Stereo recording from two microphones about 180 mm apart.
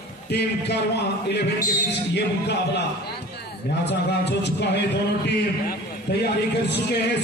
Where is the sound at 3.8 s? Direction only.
70° left (ahead or behind).